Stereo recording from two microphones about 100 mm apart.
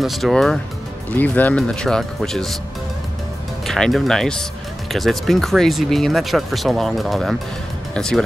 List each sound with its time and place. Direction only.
0.0 s speech: centre (ahead or behind)
1.1 s speech: 15° left (ahead or behind)
3.6 s speech: 5° left (ahead or behind)